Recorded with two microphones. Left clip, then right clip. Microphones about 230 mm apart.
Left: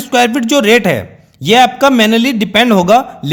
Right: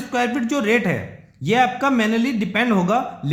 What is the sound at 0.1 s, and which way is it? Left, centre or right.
A man's voice, left.